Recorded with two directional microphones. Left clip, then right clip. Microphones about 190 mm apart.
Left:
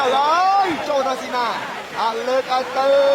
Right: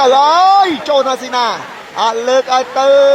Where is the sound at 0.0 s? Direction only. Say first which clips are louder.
Right 8 dB; 40° right (ahead or behind).